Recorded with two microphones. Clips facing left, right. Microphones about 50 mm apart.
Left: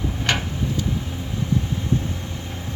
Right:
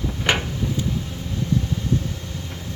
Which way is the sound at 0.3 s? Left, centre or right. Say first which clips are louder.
Right 2 dB; centre.